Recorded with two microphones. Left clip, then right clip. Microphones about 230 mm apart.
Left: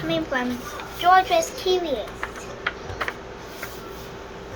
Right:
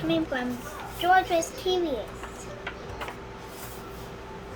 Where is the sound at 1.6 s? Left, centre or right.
Centre.